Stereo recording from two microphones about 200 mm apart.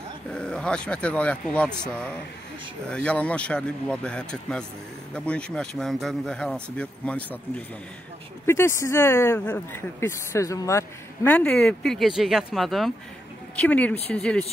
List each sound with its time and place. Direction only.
0.3 s speech: 5° left (ahead or behind)